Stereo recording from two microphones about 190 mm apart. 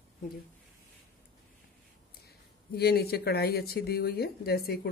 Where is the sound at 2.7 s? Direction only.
55° left (ahead or behind).